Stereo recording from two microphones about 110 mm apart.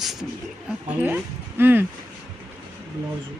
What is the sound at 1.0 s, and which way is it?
Speech, 20° right (ahead or behind).